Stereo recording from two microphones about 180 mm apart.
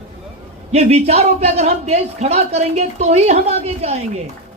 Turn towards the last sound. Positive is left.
turn(degrees=-35)  # may be behind; listen again after turning